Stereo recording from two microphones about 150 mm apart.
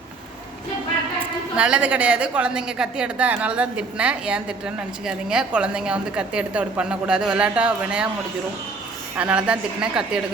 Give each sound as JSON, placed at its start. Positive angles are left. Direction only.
{"t": 1.5, "sound": "a woman's voice", "side_deg": -5}
{"t": 9.1, "sound": "a woman's voice", "side_deg": -10}